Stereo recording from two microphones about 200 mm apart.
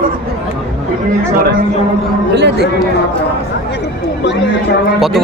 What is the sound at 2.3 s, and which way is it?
Speech, 55° right (ahead or behind).